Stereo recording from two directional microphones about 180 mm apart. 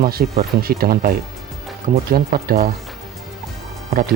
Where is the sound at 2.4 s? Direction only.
60° right (ahead or behind).